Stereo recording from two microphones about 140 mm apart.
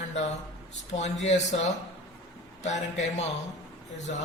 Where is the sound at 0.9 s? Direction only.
55° left (ahead or behind).